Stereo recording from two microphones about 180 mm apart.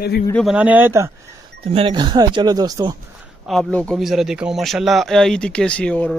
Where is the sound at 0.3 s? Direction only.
5° left (ahead or behind).